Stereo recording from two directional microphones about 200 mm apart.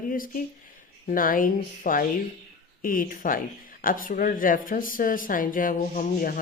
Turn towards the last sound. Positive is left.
turn(degrees=40)  # may be behind; listen again after turning